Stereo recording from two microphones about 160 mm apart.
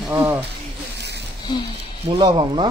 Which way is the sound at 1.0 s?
90° right.